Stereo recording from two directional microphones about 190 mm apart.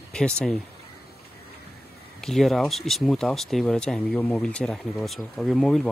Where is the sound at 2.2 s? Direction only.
Centre (ahead or behind).